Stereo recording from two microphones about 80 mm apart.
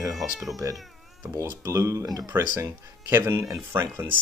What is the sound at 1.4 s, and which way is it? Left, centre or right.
Speech, right.